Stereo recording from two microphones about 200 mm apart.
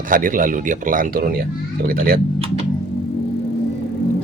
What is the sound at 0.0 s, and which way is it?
Speech, 40° right (ahead or behind).